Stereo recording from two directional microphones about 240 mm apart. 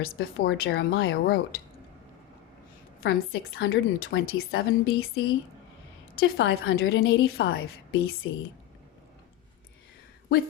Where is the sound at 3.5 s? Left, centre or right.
Left.